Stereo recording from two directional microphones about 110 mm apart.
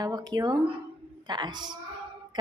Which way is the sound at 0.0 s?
35° right (ahead or behind).